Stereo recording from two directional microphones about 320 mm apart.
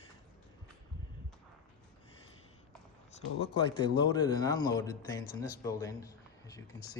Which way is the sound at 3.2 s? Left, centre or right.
Centre.